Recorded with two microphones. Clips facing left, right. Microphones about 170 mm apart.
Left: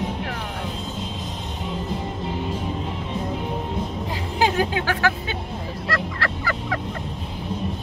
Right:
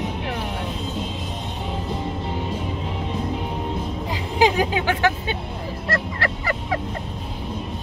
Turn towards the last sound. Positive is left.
turn(degrees=-25)  # may be behind; listen again after turning